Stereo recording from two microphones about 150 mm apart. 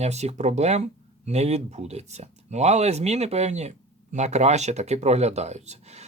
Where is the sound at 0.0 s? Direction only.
45° right (ahead or behind).